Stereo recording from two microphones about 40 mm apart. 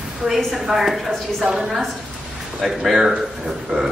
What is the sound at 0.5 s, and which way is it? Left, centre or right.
A man's voice, centre.